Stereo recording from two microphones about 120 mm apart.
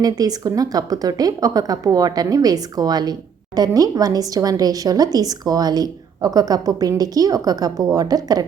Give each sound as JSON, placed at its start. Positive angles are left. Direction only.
{"t": 0.0, "sound": "speech", "side_deg": -30}